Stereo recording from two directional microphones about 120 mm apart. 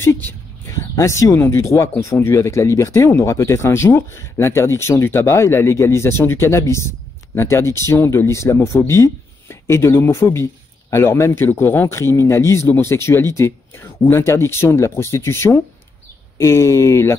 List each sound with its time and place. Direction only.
0.0 s speech: 20° left (ahead or behind)